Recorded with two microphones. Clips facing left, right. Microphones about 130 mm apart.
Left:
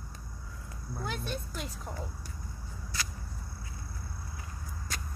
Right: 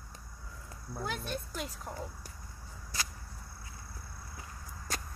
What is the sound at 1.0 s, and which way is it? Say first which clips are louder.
Speech: even; 5° right (ahead or behind).